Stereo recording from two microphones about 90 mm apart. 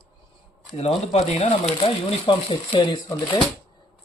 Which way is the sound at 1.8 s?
75° left (ahead or behind).